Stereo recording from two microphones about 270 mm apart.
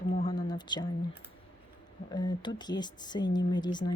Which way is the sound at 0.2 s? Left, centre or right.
Centre.